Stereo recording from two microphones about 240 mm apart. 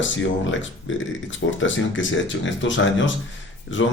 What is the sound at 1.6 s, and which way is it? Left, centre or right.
Mantra, left.